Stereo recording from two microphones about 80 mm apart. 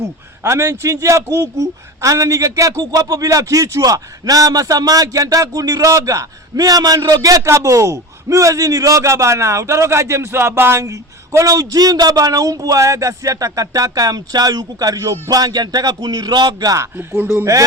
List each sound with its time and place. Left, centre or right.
0.4 s a man's voice: right
17.0 s speech: right